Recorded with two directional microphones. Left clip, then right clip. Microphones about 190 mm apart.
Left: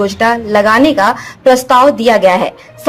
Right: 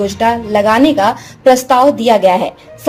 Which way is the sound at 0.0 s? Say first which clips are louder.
Left 2 dB; centre (ahead or behind).